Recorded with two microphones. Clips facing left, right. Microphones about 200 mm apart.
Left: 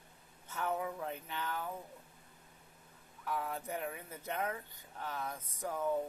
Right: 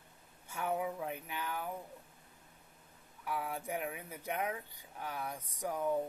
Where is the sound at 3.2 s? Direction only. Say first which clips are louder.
Even; 10° right (ahead or behind).